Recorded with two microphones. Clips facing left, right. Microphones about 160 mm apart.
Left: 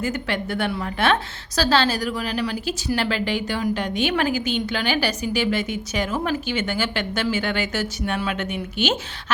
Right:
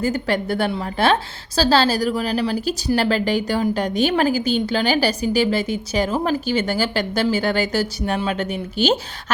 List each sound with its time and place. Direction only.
0.0 s a woman's voice: 35° right (ahead or behind)